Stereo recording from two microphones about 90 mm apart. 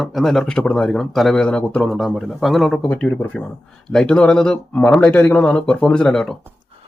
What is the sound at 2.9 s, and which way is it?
Speech, 20° left (ahead or behind).